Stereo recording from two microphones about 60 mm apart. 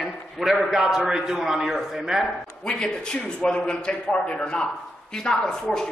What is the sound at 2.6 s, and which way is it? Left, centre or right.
Speech, centre.